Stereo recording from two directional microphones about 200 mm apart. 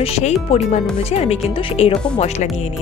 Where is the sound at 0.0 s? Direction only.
30° left (ahead or behind).